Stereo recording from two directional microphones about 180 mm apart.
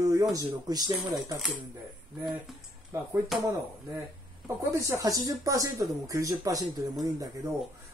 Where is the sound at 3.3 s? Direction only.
Centre (ahead or behind).